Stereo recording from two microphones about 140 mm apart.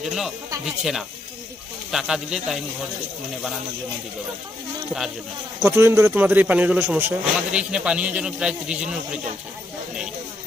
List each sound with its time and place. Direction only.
0.0 s speech: 5° right (ahead or behind)
1.9 s speech: 5° right (ahead or behind)
5.6 s a man's voice: 15° right (ahead or behind)